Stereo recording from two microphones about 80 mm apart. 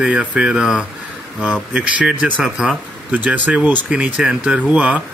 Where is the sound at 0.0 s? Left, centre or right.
Centre.